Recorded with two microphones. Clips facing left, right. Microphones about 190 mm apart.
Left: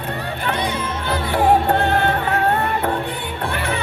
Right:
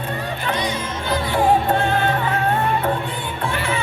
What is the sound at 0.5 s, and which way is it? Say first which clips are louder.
Music: left 1 dB; 60° left (ahead or behind).